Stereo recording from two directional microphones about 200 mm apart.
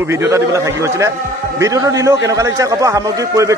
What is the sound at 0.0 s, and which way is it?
A man's voice, 10° right (ahead or behind).